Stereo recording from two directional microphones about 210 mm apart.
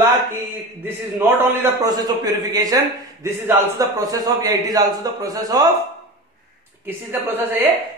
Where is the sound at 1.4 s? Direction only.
15° right (ahead or behind).